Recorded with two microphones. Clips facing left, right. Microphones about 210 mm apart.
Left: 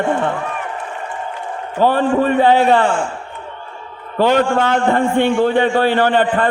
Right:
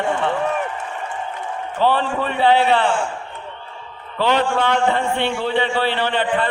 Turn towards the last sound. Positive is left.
turn(degrees=45)  # may be behind; listen again after turning